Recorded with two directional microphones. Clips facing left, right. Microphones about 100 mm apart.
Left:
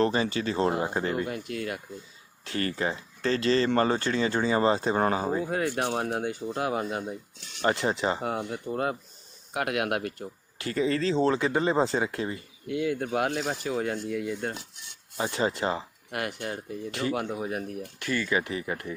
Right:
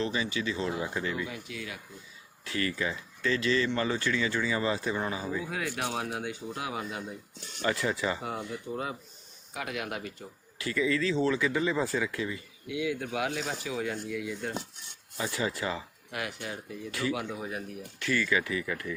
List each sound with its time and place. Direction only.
0.0 s speech: 45° left (ahead or behind)
2.4 s speech: 40° left (ahead or behind)
4.9 s speech: 50° left (ahead or behind)
10.6 s speech: 40° left (ahead or behind)
16.1 s speech: 50° left (ahead or behind)
16.9 s speech: 40° left (ahead or behind)
18.1 s speech: 30° left (ahead or behind)